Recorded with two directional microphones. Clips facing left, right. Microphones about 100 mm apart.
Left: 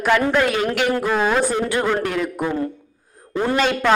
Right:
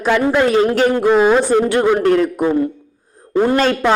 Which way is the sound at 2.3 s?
20° right (ahead or behind).